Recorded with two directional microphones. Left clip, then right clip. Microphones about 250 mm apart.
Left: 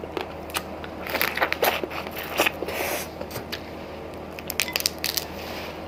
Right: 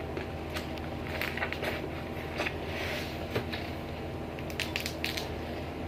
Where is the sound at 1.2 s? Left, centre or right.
Left.